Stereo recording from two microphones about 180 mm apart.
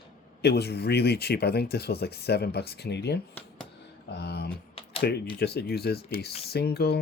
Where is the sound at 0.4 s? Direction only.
65° left (ahead or behind).